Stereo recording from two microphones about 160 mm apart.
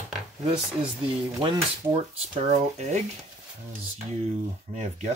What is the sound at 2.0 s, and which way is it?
Speech, 40° right (ahead or behind).